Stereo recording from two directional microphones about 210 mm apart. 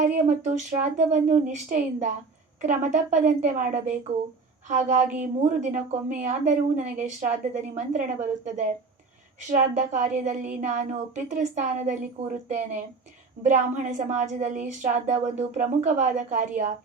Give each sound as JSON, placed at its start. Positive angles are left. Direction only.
{"t": 0.3, "sound": "a woman's voice", "side_deg": -35}